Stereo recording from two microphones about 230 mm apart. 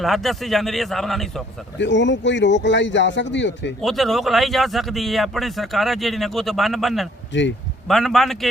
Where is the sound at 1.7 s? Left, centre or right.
Left.